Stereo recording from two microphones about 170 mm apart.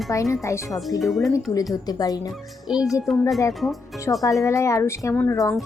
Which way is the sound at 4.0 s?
20° left (ahead or behind).